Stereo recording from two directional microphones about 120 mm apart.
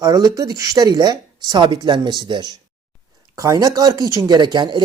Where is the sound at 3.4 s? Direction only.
30° right (ahead or behind).